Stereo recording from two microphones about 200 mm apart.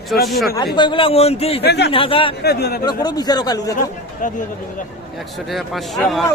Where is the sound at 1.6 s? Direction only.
55° left (ahead or behind).